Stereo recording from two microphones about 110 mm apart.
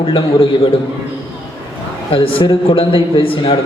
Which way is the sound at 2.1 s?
55° left (ahead or behind).